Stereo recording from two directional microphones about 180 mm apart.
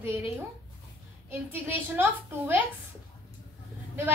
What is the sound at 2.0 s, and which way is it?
Speech, 10° right (ahead or behind).